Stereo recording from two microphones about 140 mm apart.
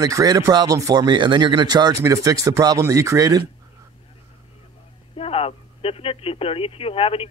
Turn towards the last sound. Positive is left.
turn(degrees=40)  # may be behind; listen again after turning